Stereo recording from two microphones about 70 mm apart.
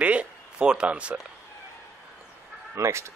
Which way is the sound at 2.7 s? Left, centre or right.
Right.